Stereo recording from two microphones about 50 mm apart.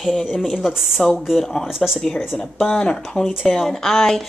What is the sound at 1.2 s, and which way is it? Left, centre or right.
Speech, centre.